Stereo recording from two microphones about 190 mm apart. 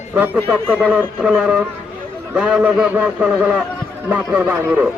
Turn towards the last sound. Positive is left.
turn(degrees=-5)  # may be behind; listen again after turning